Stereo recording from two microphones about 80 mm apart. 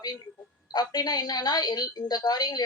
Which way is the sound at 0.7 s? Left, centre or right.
Left.